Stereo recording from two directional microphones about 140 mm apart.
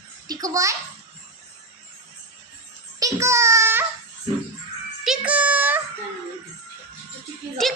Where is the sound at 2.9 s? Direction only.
25° right (ahead or behind).